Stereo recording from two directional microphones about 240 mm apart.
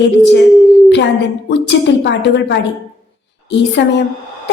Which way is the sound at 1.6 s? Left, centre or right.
Left.